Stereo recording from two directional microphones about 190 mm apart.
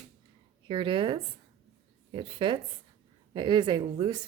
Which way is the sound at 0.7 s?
25° right (ahead or behind).